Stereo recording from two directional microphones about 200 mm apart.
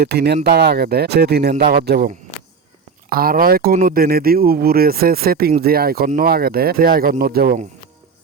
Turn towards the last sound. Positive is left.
turn(degrees=-50)  # may be behind; listen again after turning